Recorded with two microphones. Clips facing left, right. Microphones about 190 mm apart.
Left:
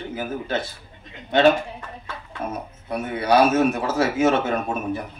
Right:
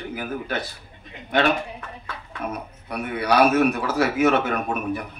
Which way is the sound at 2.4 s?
25° left (ahead or behind).